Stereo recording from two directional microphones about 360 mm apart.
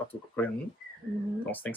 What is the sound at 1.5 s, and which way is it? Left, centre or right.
Speech, centre.